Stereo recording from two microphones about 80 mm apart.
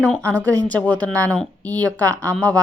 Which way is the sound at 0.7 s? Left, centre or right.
Centre.